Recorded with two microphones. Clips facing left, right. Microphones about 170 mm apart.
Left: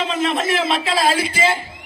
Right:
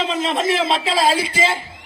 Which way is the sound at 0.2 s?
30° right (ahead or behind).